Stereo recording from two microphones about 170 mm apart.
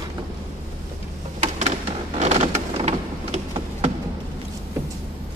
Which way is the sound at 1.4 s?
45° right (ahead or behind).